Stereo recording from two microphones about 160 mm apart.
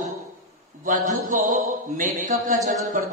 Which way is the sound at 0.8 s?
55° right (ahead or behind).